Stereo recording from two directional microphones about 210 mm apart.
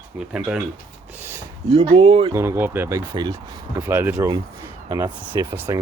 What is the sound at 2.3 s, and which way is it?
Speech, 10° right (ahead or behind).